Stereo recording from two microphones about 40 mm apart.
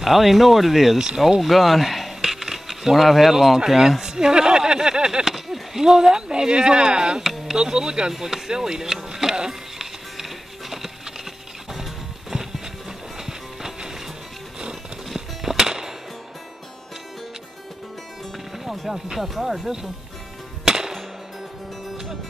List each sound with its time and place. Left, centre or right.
0.0 s speech: centre
1.4 s speech: centre
4.0 s a sound: centre
5.2 s a sound: centre
5.9 s speech: centre
8.1 s a sound: centre
11.7 s music: centre
18.6 s speech: centre
20.6 s music: centre